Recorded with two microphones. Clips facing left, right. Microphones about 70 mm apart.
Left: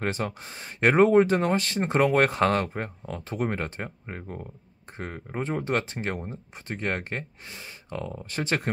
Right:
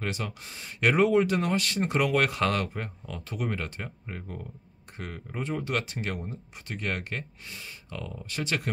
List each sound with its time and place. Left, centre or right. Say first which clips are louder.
0.0 s speech: left 4 dB; left